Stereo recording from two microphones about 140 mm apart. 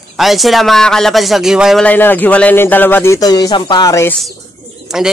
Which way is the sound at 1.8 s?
15° left (ahead or behind).